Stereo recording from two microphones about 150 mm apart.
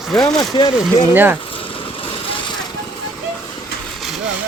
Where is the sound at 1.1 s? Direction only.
15° right (ahead or behind).